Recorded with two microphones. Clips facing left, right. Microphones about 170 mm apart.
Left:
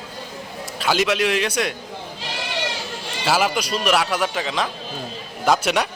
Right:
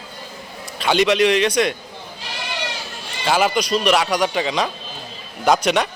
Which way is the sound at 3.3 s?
5° left (ahead or behind).